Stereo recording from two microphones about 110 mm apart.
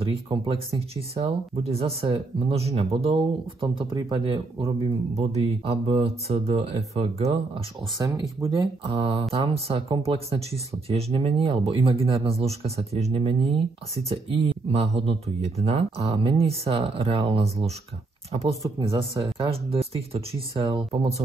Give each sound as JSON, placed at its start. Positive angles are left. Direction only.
{"t": 0.0, "sound": "speech", "side_deg": -55}
{"t": 3.6, "sound": "speech", "side_deg": -50}
{"t": 4.6, "sound": "speech", "side_deg": -70}
{"t": 8.0, "sound": "speech", "side_deg": -30}
{"t": 8.5, "sound": "speech", "side_deg": -55}
{"t": 19.2, "sound": "speech", "side_deg": -55}